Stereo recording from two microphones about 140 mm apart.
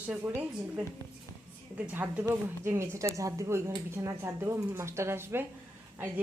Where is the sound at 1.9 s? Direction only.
10° right (ahead or behind).